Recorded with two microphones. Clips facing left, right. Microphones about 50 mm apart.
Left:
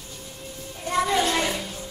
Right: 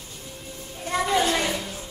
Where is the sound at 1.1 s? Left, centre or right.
Centre.